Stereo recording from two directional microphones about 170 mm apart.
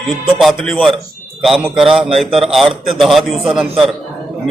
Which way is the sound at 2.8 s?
Centre (ahead or behind).